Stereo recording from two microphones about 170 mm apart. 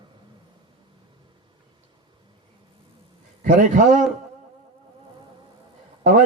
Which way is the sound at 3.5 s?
50° right (ahead or behind).